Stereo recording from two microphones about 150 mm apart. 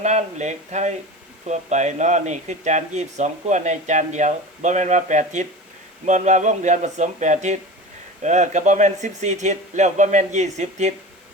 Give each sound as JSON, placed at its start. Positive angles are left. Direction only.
{"t": 0.0, "sound": "speech", "side_deg": -50}